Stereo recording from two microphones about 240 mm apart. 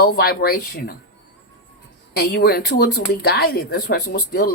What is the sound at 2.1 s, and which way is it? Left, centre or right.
Speech, left.